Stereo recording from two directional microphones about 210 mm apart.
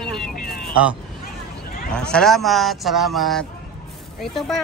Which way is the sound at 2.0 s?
5° left (ahead or behind).